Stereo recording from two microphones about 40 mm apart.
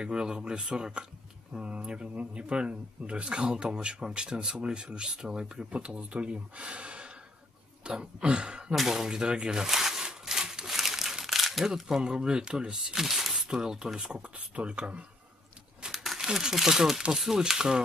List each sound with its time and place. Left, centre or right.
0.0 s speech: right
9.7 s a sound: centre
10.8 s crumpling: centre
12.0 s speech: right
13.0 s speech: centre
14.1 s speech: right
15.9 s crumpling: centre
16.3 s speech: centre